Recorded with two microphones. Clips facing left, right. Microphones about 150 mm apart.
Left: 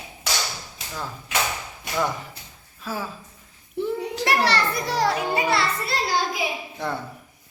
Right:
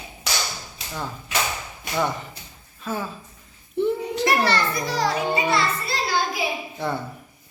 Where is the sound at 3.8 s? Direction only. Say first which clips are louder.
Right 4 dB; centre (ahead or behind).